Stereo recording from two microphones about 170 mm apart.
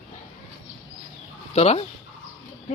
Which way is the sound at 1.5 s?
35° left (ahead or behind).